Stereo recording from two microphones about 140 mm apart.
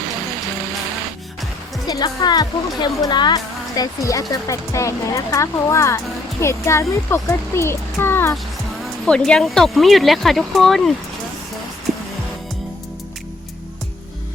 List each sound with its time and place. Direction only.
1.9 s speech: 30° left (ahead or behind)
9.0 s speech: 5° left (ahead or behind)